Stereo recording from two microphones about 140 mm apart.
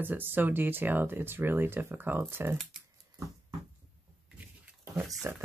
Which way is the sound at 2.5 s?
Centre (ahead or behind).